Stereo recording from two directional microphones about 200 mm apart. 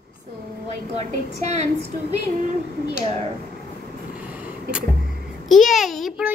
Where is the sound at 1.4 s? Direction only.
35° right (ahead or behind).